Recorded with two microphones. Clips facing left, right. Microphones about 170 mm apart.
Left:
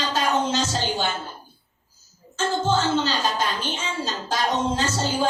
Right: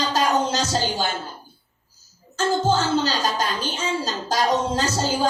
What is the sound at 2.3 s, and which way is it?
Music, 40° right (ahead or behind).